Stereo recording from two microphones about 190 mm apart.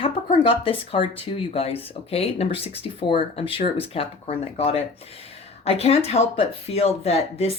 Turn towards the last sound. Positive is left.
turn(degrees=30)  # may be behind; listen again after turning